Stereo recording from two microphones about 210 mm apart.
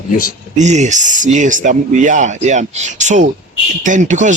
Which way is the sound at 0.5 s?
35° right (ahead or behind).